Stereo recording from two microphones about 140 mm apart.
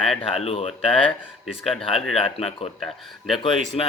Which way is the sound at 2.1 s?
45° left (ahead or behind).